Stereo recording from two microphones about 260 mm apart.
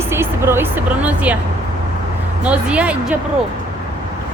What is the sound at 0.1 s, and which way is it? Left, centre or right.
Speech, centre.